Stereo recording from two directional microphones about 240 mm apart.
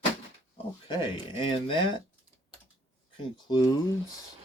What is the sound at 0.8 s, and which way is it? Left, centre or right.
Speech, centre.